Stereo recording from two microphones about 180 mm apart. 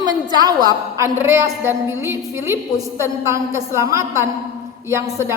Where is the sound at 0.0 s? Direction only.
20° right (ahead or behind).